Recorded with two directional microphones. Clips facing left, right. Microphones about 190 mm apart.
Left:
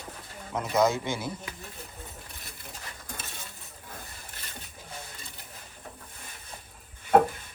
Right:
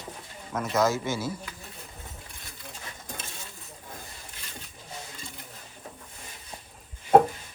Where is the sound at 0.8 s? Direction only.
20° left (ahead or behind).